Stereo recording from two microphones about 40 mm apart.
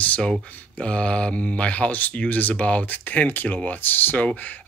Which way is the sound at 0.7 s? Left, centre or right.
Left.